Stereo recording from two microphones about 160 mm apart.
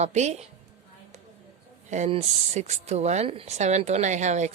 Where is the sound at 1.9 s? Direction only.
40° right (ahead or behind).